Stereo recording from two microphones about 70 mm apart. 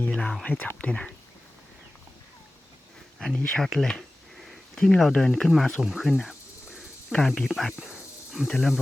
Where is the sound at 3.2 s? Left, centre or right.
Centre.